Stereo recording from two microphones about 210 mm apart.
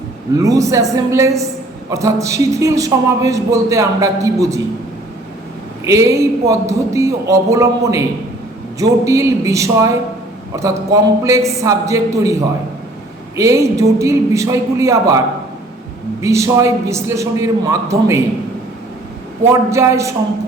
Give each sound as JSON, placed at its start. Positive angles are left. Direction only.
{"t": 0.3, "sound": "a man's voice", "side_deg": -15}
{"t": 5.8, "sound": "a man's voice", "side_deg": -15}
{"t": 16.2, "sound": "a man's voice", "side_deg": -15}
{"t": 19.5, "sound": "a man's voice", "side_deg": -15}